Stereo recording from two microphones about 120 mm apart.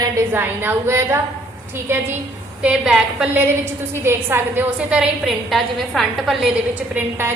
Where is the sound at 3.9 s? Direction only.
20° right (ahead or behind); by 6.4 s centre (ahead or behind).